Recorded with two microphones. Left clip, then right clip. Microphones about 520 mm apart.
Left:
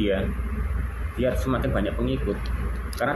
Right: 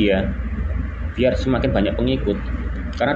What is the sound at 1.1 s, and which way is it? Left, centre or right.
Speech, left.